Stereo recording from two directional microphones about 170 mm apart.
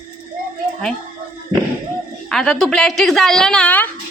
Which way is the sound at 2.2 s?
5° left (ahead or behind).